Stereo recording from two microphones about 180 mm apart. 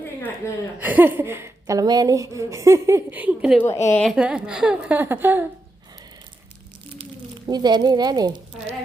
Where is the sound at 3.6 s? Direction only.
15° left (ahead or behind).